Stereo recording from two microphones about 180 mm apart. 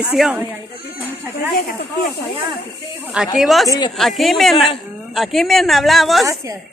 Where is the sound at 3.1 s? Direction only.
Centre (ahead or behind).